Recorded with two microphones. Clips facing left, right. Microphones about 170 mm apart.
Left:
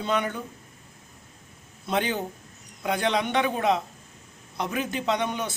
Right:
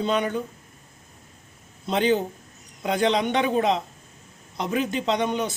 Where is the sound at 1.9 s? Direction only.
20° right (ahead or behind).